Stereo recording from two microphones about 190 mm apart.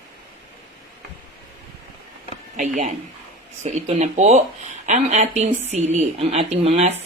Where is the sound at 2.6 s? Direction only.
40° right (ahead or behind).